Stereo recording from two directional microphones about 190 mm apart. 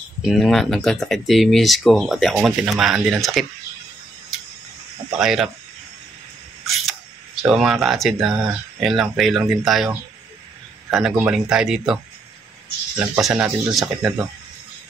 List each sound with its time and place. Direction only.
0.2 s speech: centre (ahead or behind)
5.2 s speech: centre (ahead or behind)
6.6 s camera: centre (ahead or behind)
7.4 s speech: centre (ahead or behind)